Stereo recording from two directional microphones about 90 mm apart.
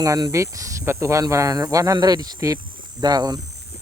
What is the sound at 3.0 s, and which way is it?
Speech, 50° right (ahead or behind).